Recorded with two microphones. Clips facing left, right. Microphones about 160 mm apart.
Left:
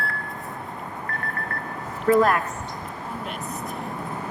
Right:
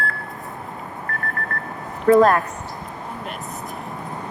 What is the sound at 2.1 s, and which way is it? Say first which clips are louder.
Speech: right 5 dB; 40° right (ahead or behind).